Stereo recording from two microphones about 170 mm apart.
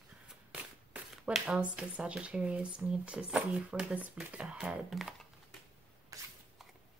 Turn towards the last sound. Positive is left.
turn(degrees=-20)  # may be behind; listen again after turning